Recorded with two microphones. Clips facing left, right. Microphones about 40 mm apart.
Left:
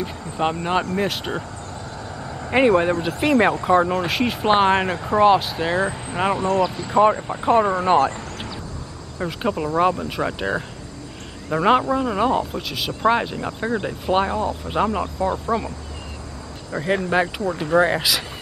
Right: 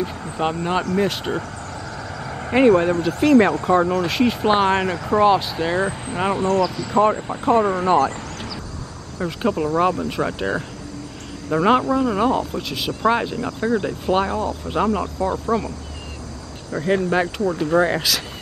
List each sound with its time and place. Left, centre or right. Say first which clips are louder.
0.4 s speech: even; centre
2.7 s speech: right 2 dB; left
4.0 s speech: right 2 dB; centre
6.4 s speech: right 1 dB; left
6.9 s speech: left 2 dB; centre
7.8 s speech: even; left
9.2 s speech: right 2 dB; centre
16.7 s speech: right 1 dB; left
17.9 s speech: even; centre